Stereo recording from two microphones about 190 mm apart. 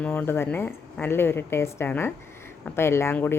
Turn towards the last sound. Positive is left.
turn(degrees=10)  # may be behind; listen again after turning